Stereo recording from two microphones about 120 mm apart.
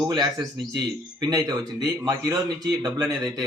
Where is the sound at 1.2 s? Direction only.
35° right (ahead or behind).